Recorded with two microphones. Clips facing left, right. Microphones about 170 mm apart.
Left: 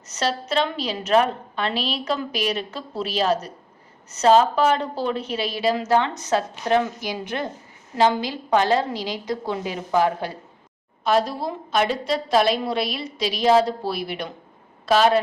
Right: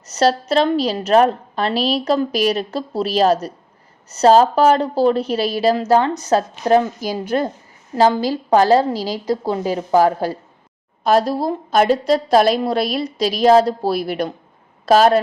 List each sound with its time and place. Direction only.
0.1 s a woman's voice: 40° right (ahead or behind)